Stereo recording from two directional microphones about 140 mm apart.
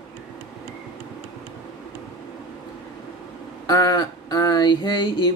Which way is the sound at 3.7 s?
30° left (ahead or behind).